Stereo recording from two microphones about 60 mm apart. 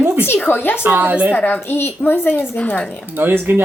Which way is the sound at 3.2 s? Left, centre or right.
Right.